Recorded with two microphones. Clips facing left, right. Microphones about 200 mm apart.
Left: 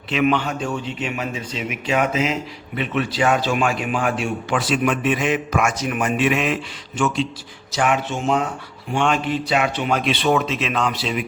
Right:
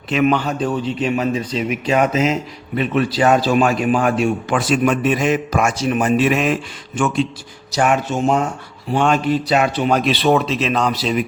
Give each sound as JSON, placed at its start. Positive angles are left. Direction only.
{"t": 0.1, "sound": "a man's voice", "side_deg": -40}